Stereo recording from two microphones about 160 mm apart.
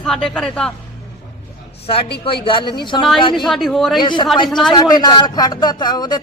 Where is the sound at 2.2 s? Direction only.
30° left (ahead or behind).